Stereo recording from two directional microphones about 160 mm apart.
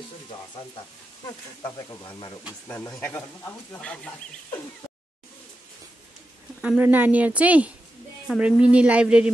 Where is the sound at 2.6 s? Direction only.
10° left (ahead or behind).